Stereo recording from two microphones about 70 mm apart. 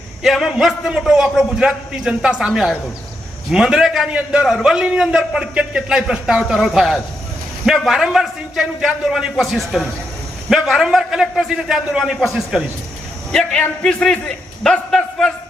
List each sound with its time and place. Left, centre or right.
0.2 s a man's voice: centre
4.1 s a man's voice: centre
13.3 s a man's voice: centre